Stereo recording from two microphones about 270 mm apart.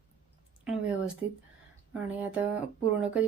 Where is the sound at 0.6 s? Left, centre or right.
Centre.